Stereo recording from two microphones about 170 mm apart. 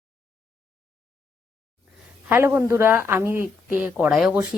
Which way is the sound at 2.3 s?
15° right (ahead or behind).